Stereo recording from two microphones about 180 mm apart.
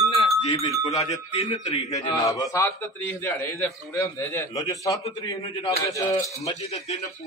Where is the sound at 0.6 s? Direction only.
20° left (ahead or behind).